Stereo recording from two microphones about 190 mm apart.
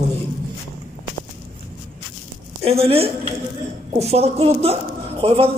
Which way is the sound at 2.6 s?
30° right (ahead or behind).